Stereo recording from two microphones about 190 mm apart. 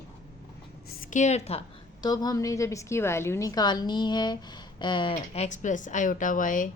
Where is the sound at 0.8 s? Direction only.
45° left (ahead or behind).